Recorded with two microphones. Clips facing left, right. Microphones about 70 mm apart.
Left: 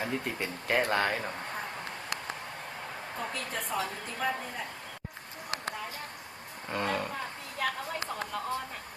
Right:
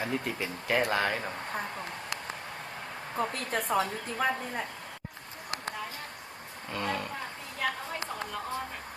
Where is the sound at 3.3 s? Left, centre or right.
Right.